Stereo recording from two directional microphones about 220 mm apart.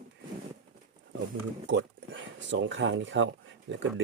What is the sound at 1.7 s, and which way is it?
Speech, 55° right (ahead or behind).